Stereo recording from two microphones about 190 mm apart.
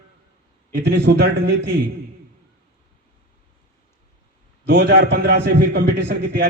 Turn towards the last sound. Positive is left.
turn(degrees=-65)  # may be behind; listen again after turning